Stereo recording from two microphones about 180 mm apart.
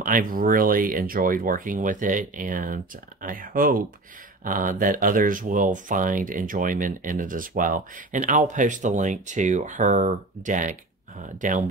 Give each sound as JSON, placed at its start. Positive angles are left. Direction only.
{"t": 0.0, "sound": "speech", "side_deg": -50}